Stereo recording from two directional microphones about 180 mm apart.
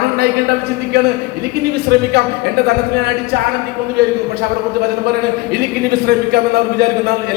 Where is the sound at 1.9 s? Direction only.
65° right (ahead or behind).